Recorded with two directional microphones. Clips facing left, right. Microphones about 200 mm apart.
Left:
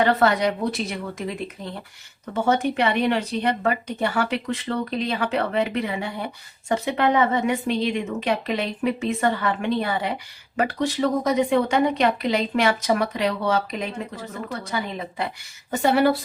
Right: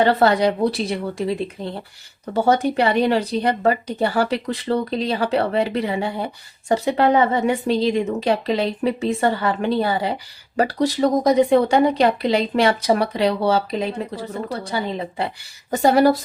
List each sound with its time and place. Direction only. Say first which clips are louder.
0.0 s speech: right 3 dB; 30° right (ahead or behind)